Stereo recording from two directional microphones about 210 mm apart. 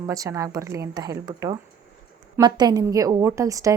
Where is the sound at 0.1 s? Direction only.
15° right (ahead or behind).